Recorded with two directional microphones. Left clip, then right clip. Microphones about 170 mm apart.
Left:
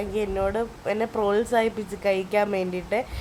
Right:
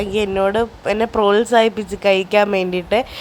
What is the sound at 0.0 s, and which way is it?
Speech, 30° right (ahead or behind).